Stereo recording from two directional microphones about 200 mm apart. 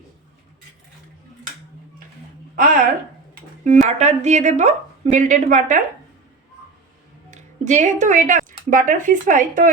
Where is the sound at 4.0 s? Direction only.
35° right (ahead or behind).